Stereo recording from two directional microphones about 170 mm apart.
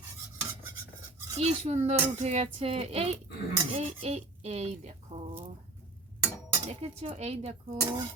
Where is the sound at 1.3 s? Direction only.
40° right (ahead or behind).